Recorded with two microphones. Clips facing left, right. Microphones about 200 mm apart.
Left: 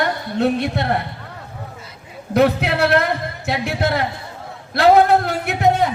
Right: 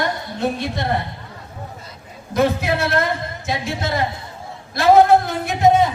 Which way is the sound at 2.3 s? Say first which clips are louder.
Left 2 dB; 65° left (ahead or behind).